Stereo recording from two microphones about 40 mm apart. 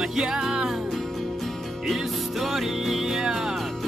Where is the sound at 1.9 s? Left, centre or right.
Centre.